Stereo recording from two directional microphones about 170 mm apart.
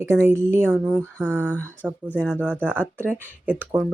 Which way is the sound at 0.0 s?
15° right (ahead or behind).